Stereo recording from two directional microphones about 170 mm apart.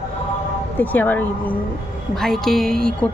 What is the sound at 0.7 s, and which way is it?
Speech, 10° left (ahead or behind).